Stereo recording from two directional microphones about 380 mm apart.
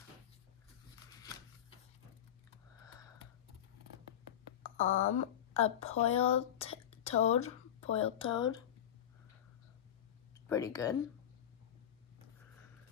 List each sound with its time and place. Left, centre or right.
4.6 s a woman's voice: centre
10.5 s speech: centre